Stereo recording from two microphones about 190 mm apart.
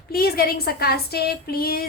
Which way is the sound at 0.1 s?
55° left (ahead or behind).